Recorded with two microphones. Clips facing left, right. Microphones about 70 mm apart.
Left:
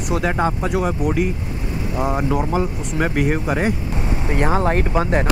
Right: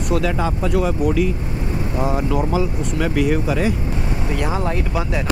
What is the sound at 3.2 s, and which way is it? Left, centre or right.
Speech, left.